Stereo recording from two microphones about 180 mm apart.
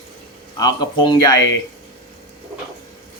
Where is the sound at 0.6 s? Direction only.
20° left (ahead or behind).